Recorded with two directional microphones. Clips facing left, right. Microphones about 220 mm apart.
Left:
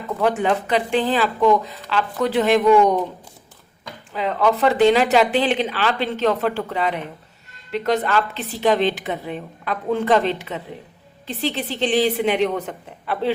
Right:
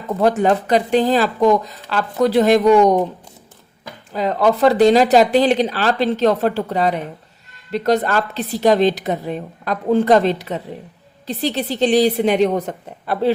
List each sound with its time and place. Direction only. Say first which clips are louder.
0.2 s a woman's voice: right 4 dB; 40° right (ahead or behind)
4.1 s a woman's voice: right 3 dB; 40° right (ahead or behind)